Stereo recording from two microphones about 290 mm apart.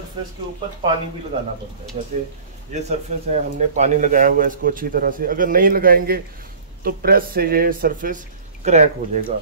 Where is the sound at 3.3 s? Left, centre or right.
Right.